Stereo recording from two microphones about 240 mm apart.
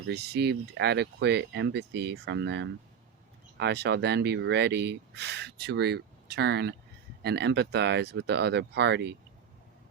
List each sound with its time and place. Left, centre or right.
0.1 s speech: right